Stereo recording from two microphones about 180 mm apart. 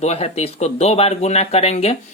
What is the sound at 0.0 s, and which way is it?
A man's voice, 35° left (ahead or behind).